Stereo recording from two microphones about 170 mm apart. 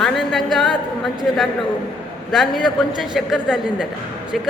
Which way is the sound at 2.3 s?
Centre (ahead or behind).